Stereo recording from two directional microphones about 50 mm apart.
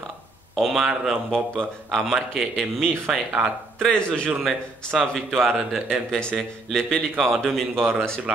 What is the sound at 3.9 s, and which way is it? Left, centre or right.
Speech, centre.